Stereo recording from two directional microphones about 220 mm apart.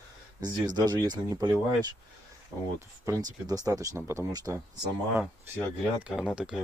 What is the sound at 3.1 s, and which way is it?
Speech, 15° right (ahead or behind).